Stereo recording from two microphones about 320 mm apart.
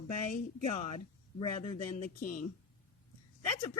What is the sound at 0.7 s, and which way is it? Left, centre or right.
Speech, centre.